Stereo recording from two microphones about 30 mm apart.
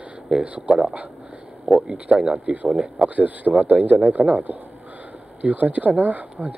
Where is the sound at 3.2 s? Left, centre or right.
Right.